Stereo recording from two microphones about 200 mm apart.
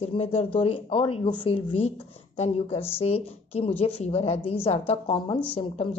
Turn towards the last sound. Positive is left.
turn(degrees=30)  # may be behind; listen again after turning